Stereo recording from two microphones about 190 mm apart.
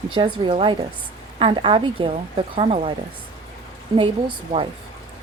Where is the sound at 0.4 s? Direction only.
25° right (ahead or behind).